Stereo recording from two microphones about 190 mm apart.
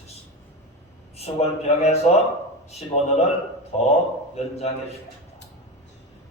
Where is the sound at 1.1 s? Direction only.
35° left (ahead or behind).